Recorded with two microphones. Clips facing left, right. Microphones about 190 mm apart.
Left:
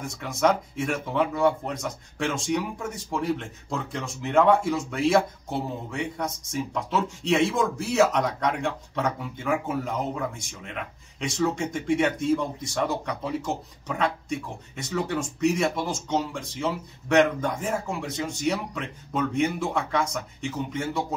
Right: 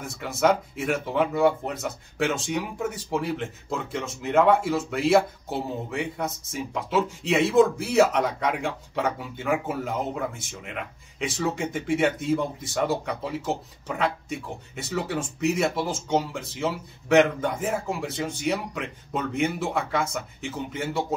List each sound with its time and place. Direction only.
0.0 s speech: 5° right (ahead or behind)